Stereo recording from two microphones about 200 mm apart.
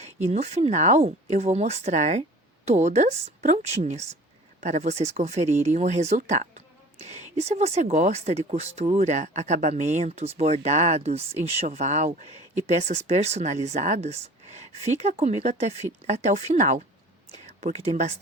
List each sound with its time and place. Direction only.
0.0 s speech: 35° right (ahead or behind)
17.3 s a sound: 35° right (ahead or behind)
17.8 s speech: 35° right (ahead or behind)